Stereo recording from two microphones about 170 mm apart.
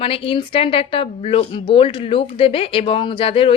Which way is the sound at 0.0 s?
30° left (ahead or behind).